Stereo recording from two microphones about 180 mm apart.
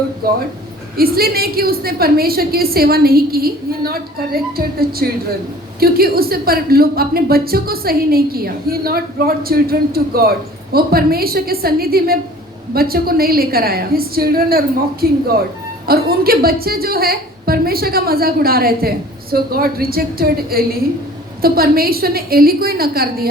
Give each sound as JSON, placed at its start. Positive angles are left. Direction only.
{"t": 0.2, "sound": "a woman's voice", "side_deg": -55}